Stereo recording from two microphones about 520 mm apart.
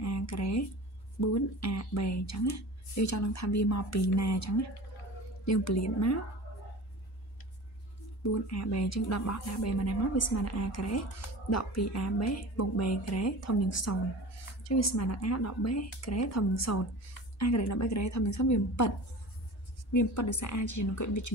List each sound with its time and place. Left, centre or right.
0.0 s a sound: left
1.2 s speech: left
8.2 s speech: left